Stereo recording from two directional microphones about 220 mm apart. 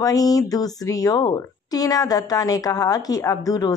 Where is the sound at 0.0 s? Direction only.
15° left (ahead or behind).